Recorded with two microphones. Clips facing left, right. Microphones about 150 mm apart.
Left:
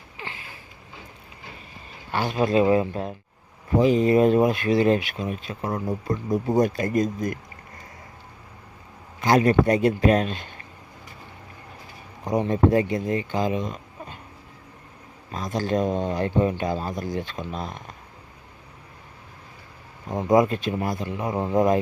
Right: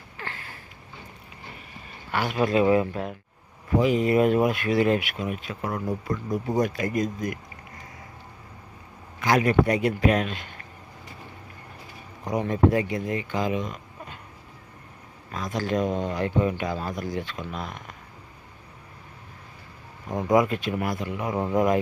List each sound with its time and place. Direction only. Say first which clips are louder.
0.2 s a sound: even; 15° left (ahead or behind)
2.1 s speech: left 2 dB; 25° left (ahead or behind)
9.2 s speech: left 2 dB; 30° left (ahead or behind)
12.3 s speech: left 2 dB; 25° left (ahead or behind)
15.3 s speech: left 2 dB; 30° left (ahead or behind)
20.1 s speech: left 2 dB; 20° left (ahead or behind)